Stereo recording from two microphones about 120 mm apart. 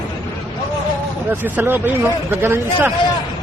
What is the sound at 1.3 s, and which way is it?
Speech, 15° right (ahead or behind).